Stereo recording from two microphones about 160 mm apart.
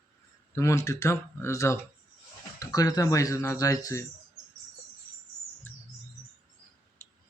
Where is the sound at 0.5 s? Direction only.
15° left (ahead or behind).